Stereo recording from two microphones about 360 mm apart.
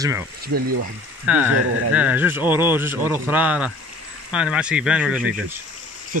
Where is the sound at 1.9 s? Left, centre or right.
Centre.